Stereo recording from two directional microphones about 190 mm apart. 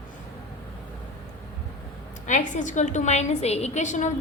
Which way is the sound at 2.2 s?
40° left (ahead or behind).